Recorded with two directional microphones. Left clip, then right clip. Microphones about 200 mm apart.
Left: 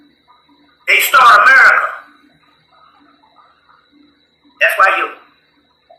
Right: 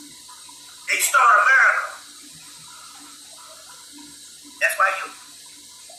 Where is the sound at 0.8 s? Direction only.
25° left (ahead or behind).